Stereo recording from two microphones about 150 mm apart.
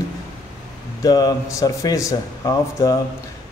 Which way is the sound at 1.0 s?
25° left (ahead or behind).